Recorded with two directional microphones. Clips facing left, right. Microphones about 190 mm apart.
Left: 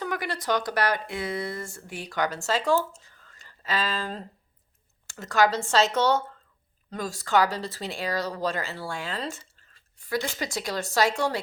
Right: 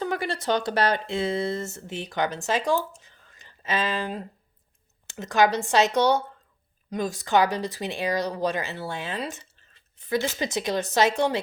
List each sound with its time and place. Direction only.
0.0 s speech: 25° right (ahead or behind)